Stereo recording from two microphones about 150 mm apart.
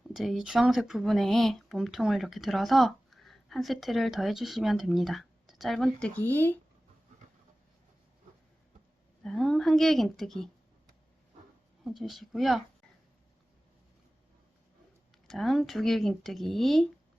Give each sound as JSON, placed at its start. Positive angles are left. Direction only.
{"t": 0.1, "sound": "speech", "side_deg": 0}
{"t": 9.2, "sound": "speech", "side_deg": 0}
{"t": 11.9, "sound": "speech", "side_deg": 0}
{"t": 15.3, "sound": "speech", "side_deg": 0}